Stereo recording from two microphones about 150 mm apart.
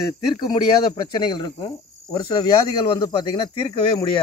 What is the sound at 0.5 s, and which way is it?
A man's voice, 30° left (ahead or behind).